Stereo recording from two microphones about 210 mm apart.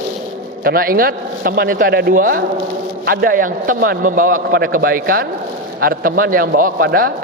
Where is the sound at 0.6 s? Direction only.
45° right (ahead or behind).